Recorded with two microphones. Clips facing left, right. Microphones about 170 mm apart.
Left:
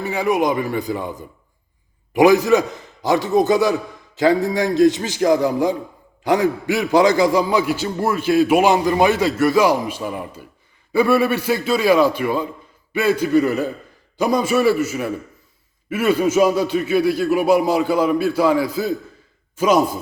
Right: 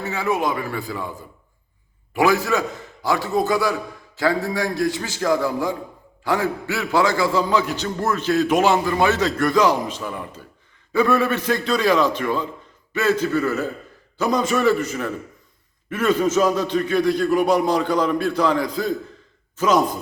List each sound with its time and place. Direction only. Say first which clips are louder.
0.0 s a man's voice: left 4 dB; 15° left (ahead or behind)